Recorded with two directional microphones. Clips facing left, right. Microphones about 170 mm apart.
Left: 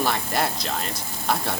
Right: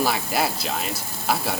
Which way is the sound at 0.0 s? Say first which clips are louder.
Right 1 dB; 5° right (ahead or behind).